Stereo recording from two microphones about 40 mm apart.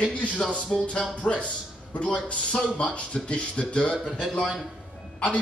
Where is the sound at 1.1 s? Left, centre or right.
Left.